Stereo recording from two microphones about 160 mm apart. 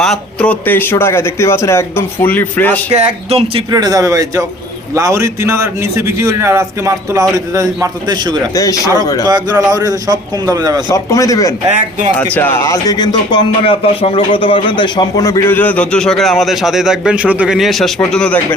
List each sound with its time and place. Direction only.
0.0 s speech: 5° left (ahead or behind)
2.9 s speech: 40° right (ahead or behind)
3.7 s a man's voice: 25° right (ahead or behind)
8.5 s speech: 20° left (ahead or behind)
9.2 s a man's voice: 25° right (ahead or behind)
10.8 s speech: 20° left (ahead or behind); by 18.3 s 5° left (ahead or behind)